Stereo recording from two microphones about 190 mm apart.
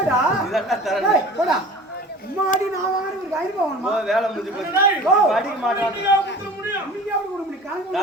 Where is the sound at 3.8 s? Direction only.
Centre (ahead or behind).